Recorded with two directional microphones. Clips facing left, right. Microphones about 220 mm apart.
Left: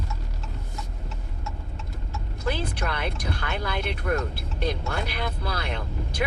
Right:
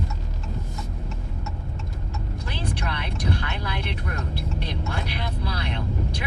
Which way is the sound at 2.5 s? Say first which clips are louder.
Left 3 dB; 50° left (ahead or behind).